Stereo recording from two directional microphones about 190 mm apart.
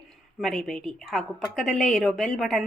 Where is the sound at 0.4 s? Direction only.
Centre (ahead or behind).